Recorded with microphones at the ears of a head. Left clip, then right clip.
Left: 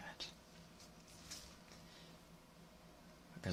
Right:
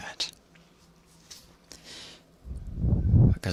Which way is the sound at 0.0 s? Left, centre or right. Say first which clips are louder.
Right 16 dB; right.